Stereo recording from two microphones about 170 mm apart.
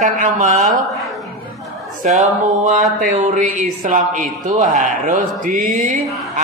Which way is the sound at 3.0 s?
50° right (ahead or behind).